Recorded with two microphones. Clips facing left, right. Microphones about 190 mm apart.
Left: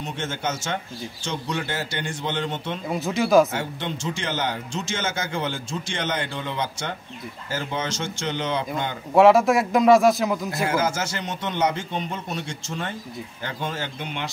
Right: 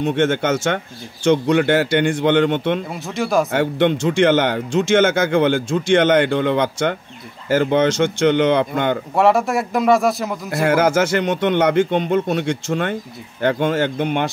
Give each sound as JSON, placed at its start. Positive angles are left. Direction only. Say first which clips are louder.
{"t": 0.0, "sound": "speech", "louder": "right 11 dB", "side_deg": -65}
{"t": 2.9, "sound": "speech", "louder": "left 1 dB", "side_deg": 0}
{"t": 3.5, "sound": "speech", "louder": "right 12 dB", "side_deg": -60}
{"t": 9.1, "sound": "speech", "louder": "left 3 dB", "side_deg": 0}
{"t": 10.5, "sound": "speech", "louder": "right 8 dB", "side_deg": -65}